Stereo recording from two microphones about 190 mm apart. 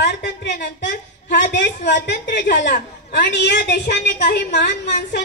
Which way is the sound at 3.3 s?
60° left (ahead or behind).